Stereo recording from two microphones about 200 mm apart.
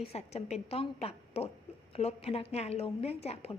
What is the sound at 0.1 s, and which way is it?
A woman's voice, 30° left (ahead or behind).